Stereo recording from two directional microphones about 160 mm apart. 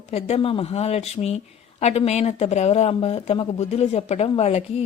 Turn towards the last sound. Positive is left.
turn(degrees=40)  # may be behind; listen again after turning